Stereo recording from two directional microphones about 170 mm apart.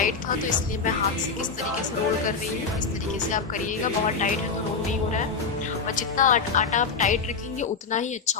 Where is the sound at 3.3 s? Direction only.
50° left (ahead or behind).